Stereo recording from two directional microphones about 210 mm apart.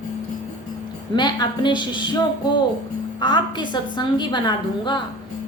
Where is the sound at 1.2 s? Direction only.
20° left (ahead or behind).